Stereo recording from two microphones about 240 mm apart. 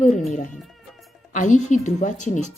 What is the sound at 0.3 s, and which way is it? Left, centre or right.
Speech, left.